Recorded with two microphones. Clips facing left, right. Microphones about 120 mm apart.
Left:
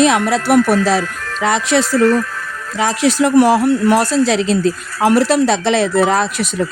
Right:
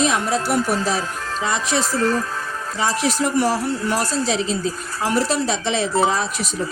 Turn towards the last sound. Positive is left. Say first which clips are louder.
# left 7 dB
turn(degrees=75)  # may be behind; listen again after turning